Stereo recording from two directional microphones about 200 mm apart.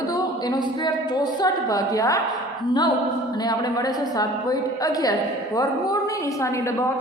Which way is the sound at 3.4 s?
20° left (ahead or behind).